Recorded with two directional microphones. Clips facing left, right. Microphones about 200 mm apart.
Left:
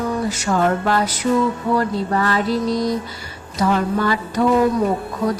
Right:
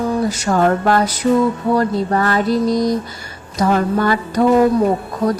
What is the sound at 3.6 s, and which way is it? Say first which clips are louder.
Music: right 3 dB; 45° right (ahead or behind).